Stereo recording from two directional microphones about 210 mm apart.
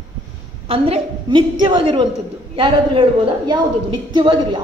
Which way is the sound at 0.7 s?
25° right (ahead or behind).